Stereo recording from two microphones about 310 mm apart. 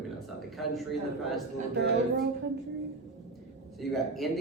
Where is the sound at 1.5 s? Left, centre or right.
Right.